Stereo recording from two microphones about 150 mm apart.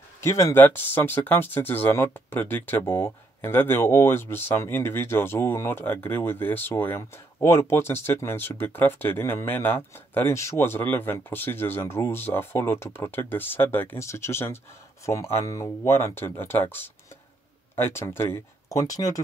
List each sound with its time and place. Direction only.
0.2 s speech: 20° left (ahead or behind)